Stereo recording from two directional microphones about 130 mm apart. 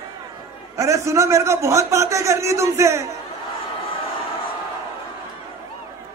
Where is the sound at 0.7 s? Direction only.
25° right (ahead or behind).